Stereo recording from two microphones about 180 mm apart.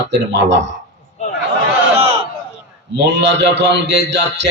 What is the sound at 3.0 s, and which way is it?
Speech, 70° right (ahead or behind).